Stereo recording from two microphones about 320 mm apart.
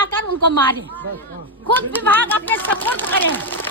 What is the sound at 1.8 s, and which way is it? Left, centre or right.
A woman's voice, centre.